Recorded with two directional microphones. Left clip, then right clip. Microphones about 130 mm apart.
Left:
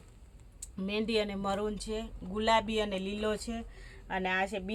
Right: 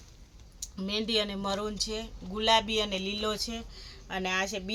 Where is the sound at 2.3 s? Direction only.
20° left (ahead or behind).